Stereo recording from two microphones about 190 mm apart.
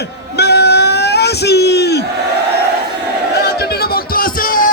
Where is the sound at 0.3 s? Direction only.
60° left (ahead or behind).